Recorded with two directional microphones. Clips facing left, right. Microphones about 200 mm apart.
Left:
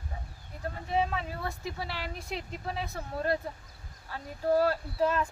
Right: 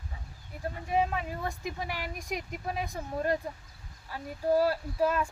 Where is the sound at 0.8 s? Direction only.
15° right (ahead or behind).